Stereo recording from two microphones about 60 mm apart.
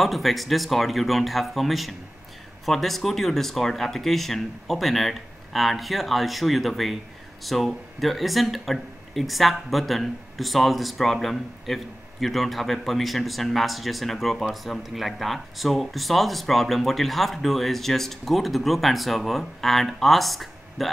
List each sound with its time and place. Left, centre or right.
0.0 s speech: centre